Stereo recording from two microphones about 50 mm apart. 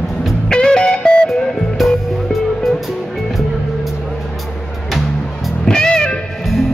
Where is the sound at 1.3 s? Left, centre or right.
Centre.